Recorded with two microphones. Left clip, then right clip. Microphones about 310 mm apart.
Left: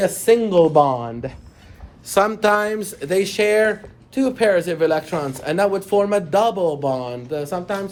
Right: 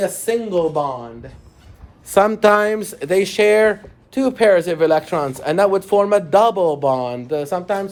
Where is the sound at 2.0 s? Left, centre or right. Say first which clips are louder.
Right 3 dB; right.